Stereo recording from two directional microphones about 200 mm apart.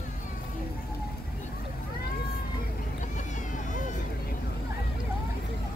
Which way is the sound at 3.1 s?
40° left (ahead or behind).